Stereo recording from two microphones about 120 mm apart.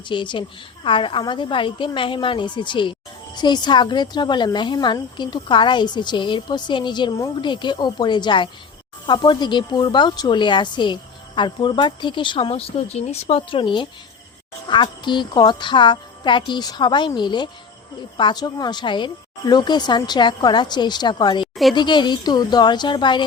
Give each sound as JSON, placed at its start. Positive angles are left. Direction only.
{"t": 0.1, "sound": "a woman's voice", "side_deg": 45}
{"t": 13.5, "sound": "a woman's voice", "side_deg": 45}